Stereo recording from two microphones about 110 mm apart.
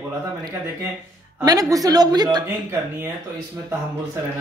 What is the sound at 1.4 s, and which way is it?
A woman's voice, 35° right (ahead or behind).